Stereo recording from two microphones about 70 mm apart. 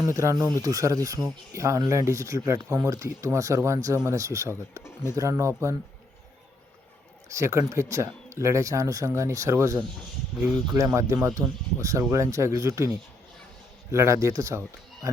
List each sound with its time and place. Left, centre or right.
0.1 s speech: right
2.7 s speech: right
7.3 s speech: right
10.8 s speech: right
13.9 s speech: right